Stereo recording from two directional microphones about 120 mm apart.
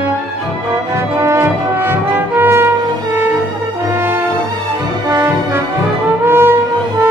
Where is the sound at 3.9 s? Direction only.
15° right (ahead or behind).